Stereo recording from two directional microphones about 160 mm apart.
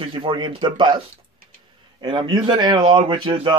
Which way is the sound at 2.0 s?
30° right (ahead or behind).